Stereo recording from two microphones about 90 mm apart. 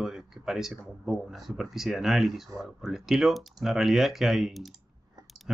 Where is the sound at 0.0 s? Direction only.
5° right (ahead or behind).